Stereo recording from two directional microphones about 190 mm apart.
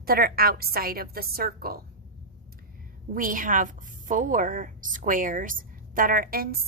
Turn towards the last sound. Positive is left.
turn(degrees=-50)  # may be behind; listen again after turning